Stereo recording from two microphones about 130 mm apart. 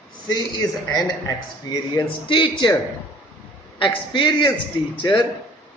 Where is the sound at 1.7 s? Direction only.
30° left (ahead or behind).